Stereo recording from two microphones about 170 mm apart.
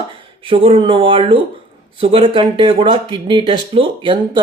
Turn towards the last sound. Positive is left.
turn(degrees=-30)  # may be behind; listen again after turning